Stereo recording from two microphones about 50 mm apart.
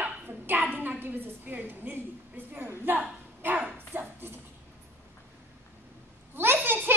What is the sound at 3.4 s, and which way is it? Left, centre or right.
Speech, right.